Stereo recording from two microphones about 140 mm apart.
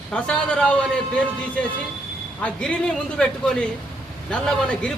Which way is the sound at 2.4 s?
5° left (ahead or behind).